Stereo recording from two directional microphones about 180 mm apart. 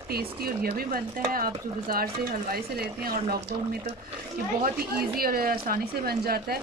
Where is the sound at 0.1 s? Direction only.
60° right (ahead or behind).